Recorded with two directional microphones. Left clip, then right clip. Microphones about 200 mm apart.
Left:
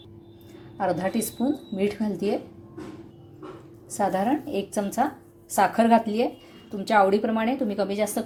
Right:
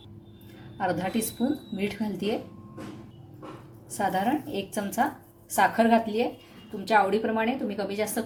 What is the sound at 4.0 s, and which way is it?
A woman's voice, 20° left (ahead or behind).